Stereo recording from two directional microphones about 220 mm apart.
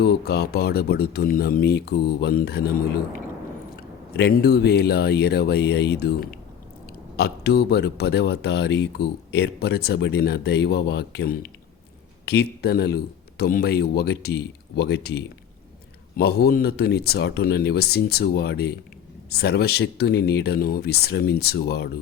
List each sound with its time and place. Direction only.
0.0 s speech: 50° left (ahead or behind)
4.1 s speech: 50° left (ahead or behind)